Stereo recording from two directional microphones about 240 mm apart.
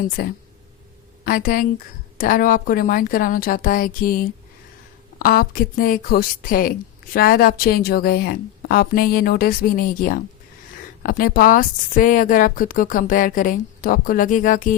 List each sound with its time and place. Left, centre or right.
0.2 s a woman's voice: left